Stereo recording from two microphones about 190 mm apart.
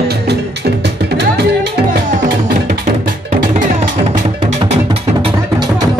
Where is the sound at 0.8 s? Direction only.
60° right (ahead or behind).